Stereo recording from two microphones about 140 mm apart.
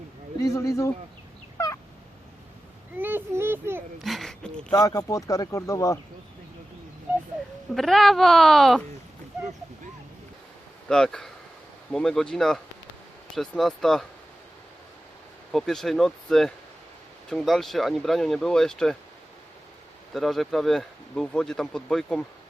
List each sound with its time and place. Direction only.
0.3 s speech: 20° left (ahead or behind)
1.5 s a sound: 20° left (ahead or behind)
2.9 s speech: 15° right (ahead or behind)
4.0 s speech: centre (ahead or behind)
4.7 s speech: 25° left (ahead or behind)
7.8 s speech: centre (ahead or behind)
10.8 s speech: 5° left (ahead or behind)
15.5 s speech: centre (ahead or behind)
20.1 s speech: centre (ahead or behind)